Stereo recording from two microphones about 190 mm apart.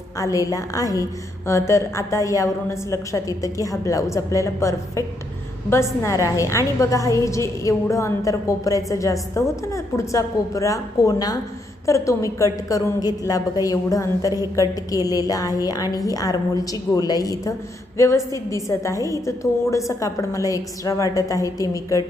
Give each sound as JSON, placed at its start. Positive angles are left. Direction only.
{"t": 0.2, "sound": "a woman's voice", "side_deg": 15}